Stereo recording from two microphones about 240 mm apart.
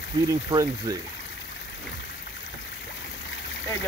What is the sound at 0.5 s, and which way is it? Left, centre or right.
Speech, centre.